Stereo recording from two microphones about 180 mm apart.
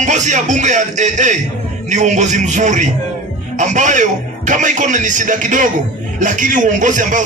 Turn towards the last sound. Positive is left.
turn(degrees=-45)  # may be behind; listen again after turning